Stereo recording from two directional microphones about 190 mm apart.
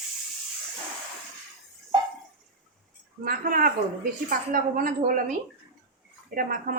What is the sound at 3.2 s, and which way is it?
A woman's voice, 45° right (ahead or behind).